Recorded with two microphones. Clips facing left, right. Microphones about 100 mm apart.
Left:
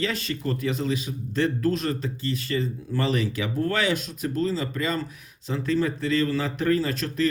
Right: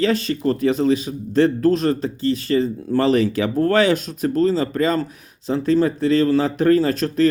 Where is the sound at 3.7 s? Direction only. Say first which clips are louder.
Right 9 dB; 35° right (ahead or behind).